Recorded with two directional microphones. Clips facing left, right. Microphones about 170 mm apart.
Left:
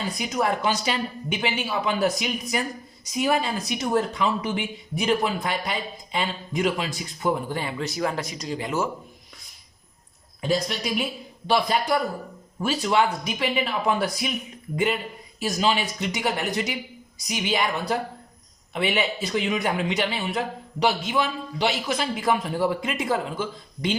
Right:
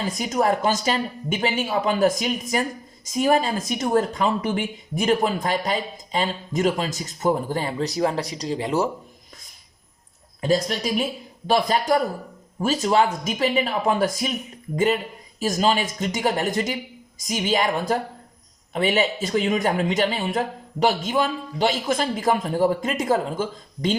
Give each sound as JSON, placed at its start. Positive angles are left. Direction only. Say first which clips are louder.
{"t": 0.2, "sound": "speech", "louder": "right 4 dB", "side_deg": -45}
{"t": 11.4, "sound": "speech", "louder": "right 2 dB", "side_deg": -45}
{"t": 15.4, "sound": "speech", "louder": "right 3 dB", "side_deg": -45}